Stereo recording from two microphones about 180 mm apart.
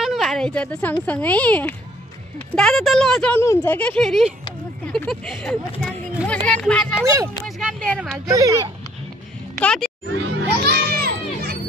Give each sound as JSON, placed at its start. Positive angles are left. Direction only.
{"t": 0.0, "sound": "speech", "side_deg": 0}
{"t": 3.3, "sound": "speech", "side_deg": 15}
{"t": 7.4, "sound": "a sound", "side_deg": 0}
{"t": 8.3, "sound": "speech", "side_deg": -15}
{"t": 9.6, "sound": "speech", "side_deg": 5}
{"t": 10.1, "sound": "music", "side_deg": -75}